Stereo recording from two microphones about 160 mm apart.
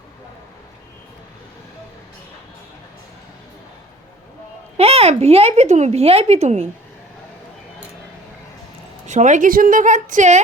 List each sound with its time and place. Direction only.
4.8 s speech: 40° right (ahead or behind)
9.0 s a woman's voice: 50° right (ahead or behind)